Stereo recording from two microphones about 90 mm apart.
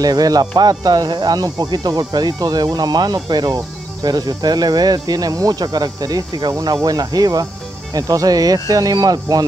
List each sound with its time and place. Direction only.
0.0 s speech: 45° right (ahead or behind)